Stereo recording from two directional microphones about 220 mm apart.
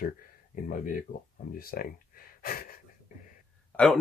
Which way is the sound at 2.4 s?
40° left (ahead or behind).